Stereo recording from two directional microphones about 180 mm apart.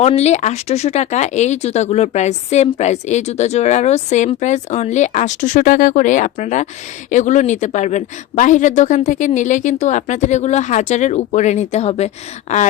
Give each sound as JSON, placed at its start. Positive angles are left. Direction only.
{"t": 0.0, "sound": "speech", "side_deg": 35}